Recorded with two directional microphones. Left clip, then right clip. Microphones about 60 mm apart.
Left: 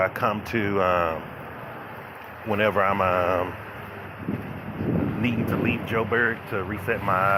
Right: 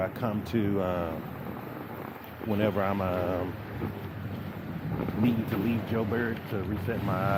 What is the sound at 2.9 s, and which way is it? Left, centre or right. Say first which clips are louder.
Speech: left 8 dB; left.